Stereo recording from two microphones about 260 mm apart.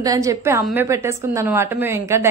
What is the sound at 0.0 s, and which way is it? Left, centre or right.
A woman's voice, centre.